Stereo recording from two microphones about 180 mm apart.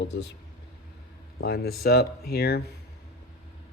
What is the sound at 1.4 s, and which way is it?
Speech, 60° left (ahead or behind).